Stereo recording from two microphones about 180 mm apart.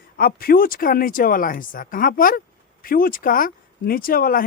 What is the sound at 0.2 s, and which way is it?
Speech, 55° left (ahead or behind).